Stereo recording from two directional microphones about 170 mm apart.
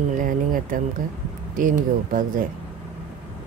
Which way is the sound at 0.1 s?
50° right (ahead or behind).